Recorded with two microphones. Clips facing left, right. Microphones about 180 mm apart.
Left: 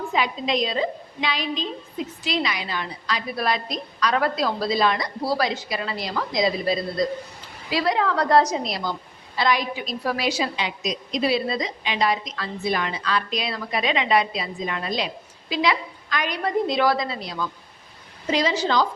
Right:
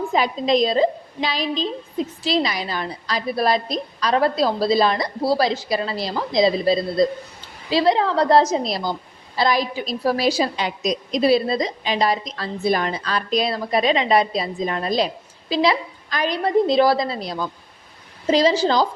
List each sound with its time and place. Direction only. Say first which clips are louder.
0.1 s a woman's voice: right 5 dB; 40° right (ahead or behind)